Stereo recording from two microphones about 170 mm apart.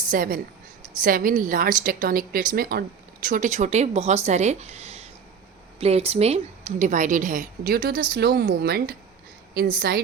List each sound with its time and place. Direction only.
0.1 s a woman's voice: 55° right (ahead or behind)
3.2 s a woman's voice: 50° right (ahead or behind)